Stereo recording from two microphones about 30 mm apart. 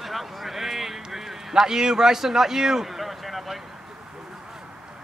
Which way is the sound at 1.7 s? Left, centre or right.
Right.